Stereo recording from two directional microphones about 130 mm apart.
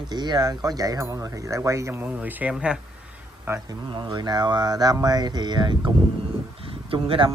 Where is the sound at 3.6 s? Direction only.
40° right (ahead or behind).